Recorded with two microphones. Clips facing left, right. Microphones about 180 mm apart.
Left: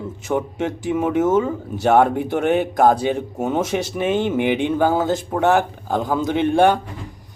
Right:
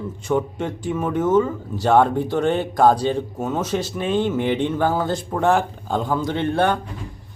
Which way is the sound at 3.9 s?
10° left (ahead or behind).